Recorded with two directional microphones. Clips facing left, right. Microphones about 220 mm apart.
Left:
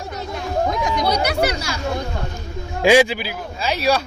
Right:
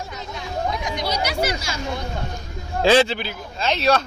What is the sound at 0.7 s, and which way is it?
Chatter, 60° left (ahead or behind).